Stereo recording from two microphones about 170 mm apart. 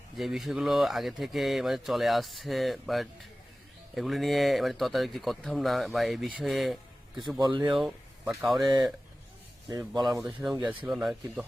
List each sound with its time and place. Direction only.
0.2 s speech: centre (ahead or behind)
7.2 s speech: 25° right (ahead or behind)
7.7 s speech: centre (ahead or behind)
9.6 s speech: 25° right (ahead or behind)
10.4 s speech: 5° right (ahead or behind)